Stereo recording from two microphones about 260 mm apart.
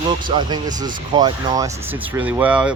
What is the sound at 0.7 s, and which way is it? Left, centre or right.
Speech, right.